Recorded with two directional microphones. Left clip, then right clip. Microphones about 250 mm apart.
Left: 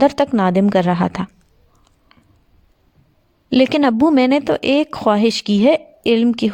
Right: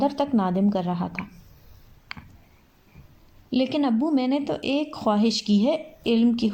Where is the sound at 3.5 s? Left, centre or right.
Left.